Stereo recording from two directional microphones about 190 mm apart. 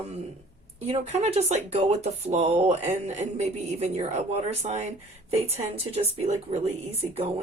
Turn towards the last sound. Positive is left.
turn(degrees=-30)  # may be behind; listen again after turning